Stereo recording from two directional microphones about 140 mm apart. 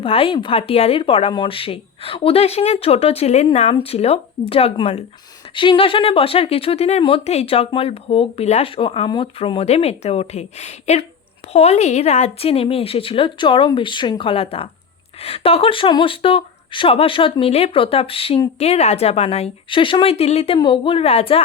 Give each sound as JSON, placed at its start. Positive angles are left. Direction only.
{"t": 0.0, "sound": "speech", "side_deg": 40}
{"t": 20.6, "sound": "speech", "side_deg": 35}